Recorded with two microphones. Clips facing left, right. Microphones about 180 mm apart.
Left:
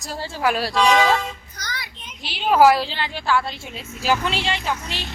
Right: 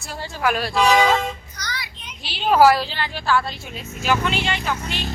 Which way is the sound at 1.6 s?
50° left (ahead or behind).